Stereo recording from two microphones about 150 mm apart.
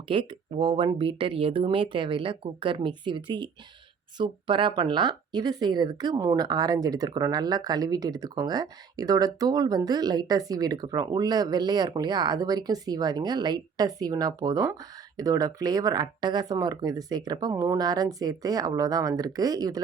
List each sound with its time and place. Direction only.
0.1 s speech: 35° right (ahead or behind)